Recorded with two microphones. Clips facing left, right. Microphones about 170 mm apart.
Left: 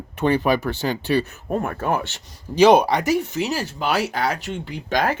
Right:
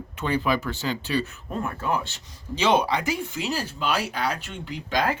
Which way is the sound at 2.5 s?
50° left (ahead or behind).